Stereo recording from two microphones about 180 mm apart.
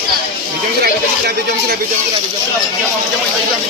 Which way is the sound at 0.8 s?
65° right (ahead or behind).